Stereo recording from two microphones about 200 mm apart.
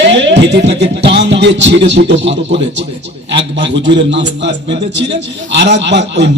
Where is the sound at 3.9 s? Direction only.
60° right (ahead or behind).